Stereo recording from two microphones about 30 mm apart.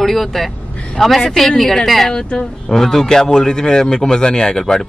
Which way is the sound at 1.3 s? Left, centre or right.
Centre.